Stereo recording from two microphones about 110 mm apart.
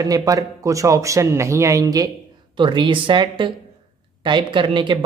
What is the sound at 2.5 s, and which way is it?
Speech, 45° right (ahead or behind).